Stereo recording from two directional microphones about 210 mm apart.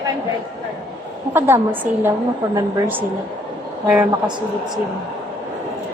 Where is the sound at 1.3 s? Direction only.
10° right (ahead or behind).